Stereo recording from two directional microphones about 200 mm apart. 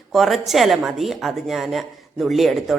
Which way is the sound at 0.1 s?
Centre (ahead or behind).